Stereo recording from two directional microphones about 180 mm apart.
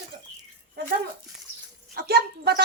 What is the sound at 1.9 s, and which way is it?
Speech, 65° right (ahead or behind).